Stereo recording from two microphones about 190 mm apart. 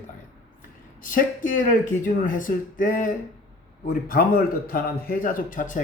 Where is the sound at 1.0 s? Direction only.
45° left (ahead or behind).